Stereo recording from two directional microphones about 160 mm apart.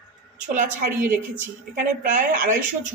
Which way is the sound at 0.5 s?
60° right (ahead or behind).